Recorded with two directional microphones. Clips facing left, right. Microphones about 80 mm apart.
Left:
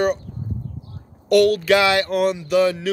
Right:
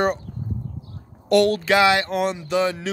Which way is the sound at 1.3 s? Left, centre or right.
Right.